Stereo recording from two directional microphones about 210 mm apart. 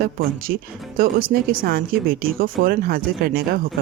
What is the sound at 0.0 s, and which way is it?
Speech, 45° right (ahead or behind).